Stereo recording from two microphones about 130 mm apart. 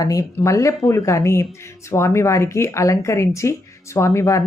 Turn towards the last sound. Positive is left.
turn(degrees=25)  # may be behind; listen again after turning